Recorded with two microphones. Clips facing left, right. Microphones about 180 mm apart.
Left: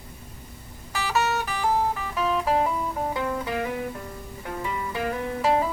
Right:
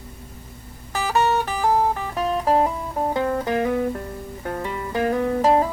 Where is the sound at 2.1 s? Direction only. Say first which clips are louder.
Right 3 dB; 40° right (ahead or behind).